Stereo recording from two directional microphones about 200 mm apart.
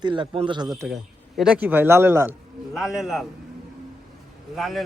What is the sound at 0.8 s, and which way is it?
A man's voice, centre (ahead or behind).